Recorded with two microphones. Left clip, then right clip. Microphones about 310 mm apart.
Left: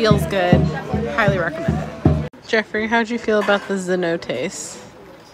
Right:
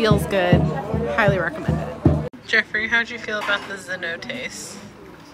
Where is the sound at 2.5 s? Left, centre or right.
Centre.